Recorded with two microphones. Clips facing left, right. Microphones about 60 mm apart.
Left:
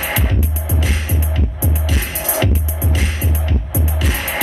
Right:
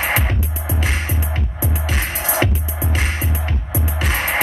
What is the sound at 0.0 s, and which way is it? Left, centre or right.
Music, right.